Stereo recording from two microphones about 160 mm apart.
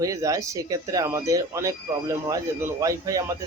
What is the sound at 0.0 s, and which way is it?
Speech, 20° right (ahead or behind).